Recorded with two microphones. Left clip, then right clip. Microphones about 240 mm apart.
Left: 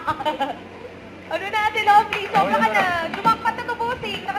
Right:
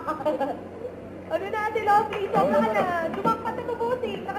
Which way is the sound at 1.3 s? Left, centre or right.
Centre.